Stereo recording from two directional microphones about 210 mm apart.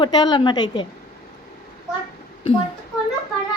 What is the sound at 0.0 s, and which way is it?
Speech, 20° left (ahead or behind).